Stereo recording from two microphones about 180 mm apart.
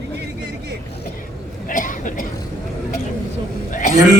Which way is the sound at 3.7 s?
45° left (ahead or behind).